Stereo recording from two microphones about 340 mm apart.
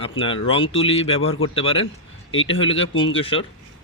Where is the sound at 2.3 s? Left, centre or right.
Left.